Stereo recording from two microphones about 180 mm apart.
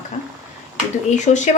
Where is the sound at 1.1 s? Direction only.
40° left (ahead or behind).